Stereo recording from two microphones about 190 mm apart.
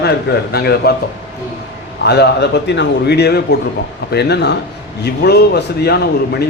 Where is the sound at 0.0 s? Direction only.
60° left (ahead or behind).